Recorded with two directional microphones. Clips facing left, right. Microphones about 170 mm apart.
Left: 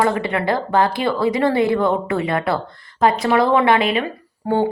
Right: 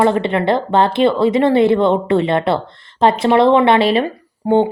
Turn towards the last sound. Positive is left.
turn(degrees=-20)  # may be behind; listen again after turning